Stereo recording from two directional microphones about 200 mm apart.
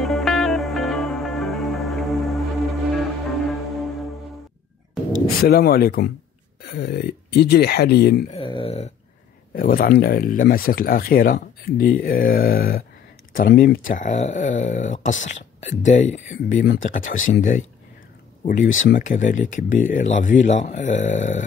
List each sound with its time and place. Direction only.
0.0 s music: centre (ahead or behind)
5.1 s speech: 50° left (ahead or behind)
8.3 s a sound: 25° left (ahead or behind)
9.5 s speech: 45° left (ahead or behind)